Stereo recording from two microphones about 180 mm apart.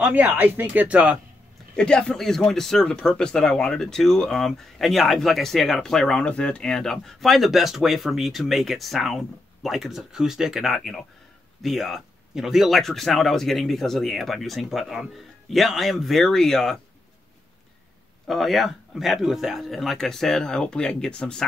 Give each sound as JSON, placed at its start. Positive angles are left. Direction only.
{"t": 0.0, "sound": "speech", "side_deg": -10}
{"t": 1.8, "sound": "speech", "side_deg": 5}
{"t": 18.2, "sound": "speech", "side_deg": 0}